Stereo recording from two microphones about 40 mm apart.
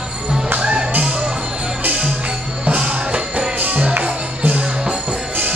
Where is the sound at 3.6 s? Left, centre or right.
Right.